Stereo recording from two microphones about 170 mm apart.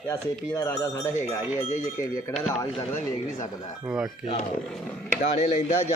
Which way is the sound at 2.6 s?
20° left (ahead or behind).